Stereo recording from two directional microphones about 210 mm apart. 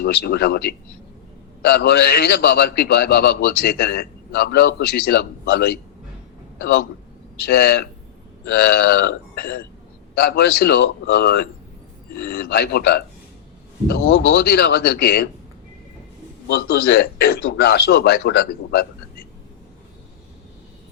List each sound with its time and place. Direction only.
0.0 s a man's voice: 50° left (ahead or behind)
16.5 s a man's voice: 50° left (ahead or behind)